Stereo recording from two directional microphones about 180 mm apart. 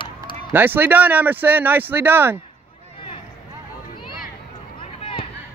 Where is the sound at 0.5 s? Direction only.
10° right (ahead or behind).